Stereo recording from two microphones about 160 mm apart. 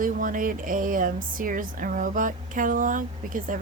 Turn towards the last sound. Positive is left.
turn(degrees=-55)  # may be behind; listen again after turning